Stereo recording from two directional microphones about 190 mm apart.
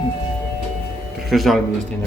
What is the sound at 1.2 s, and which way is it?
Speech, centre (ahead or behind).